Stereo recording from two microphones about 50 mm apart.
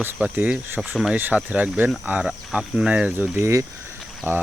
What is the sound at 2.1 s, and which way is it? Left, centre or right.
Speech, centre.